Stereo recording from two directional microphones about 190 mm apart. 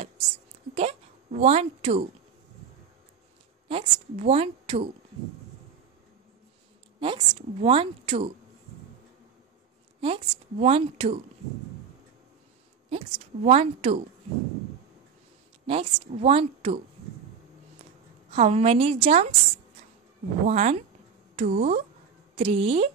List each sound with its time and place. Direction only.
0.7 s a sound: 35° right (ahead or behind)
3.6 s a woman's voice: 30° right (ahead or behind)
7.0 s a woman's voice: 25° right (ahead or behind)
9.9 s a woman's voice: 30° right (ahead or behind)
12.9 s a woman's voice: 35° right (ahead or behind)
15.6 s a woman's voice: 30° right (ahead or behind)
18.3 s a woman's voice: 35° right (ahead or behind)
20.4 s a woman's voice: 35° right (ahead or behind)